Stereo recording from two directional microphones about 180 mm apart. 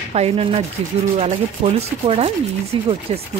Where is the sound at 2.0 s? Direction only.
35° right (ahead or behind).